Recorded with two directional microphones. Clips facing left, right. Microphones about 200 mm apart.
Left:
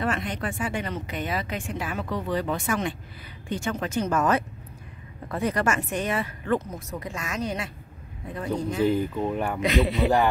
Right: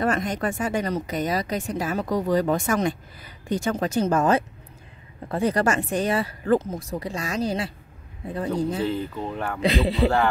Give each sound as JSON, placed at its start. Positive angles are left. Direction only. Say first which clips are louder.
{"t": 0.0, "sound": "speech", "louder": "right 4 dB", "side_deg": -45}
{"t": 8.8, "sound": "speech", "louder": "left 3 dB", "side_deg": 15}
{"t": 9.6, "sound": "speech", "louder": "right 2 dB", "side_deg": -30}
{"t": 10.0, "sound": "speech", "louder": "right 1 dB", "side_deg": 15}